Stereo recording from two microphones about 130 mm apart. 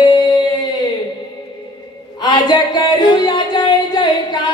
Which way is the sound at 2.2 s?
30° left (ahead or behind).